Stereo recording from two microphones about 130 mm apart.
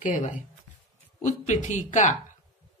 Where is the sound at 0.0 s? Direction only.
75° left (ahead or behind).